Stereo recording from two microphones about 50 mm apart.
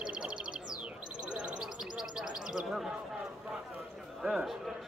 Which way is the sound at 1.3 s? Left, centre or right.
Right.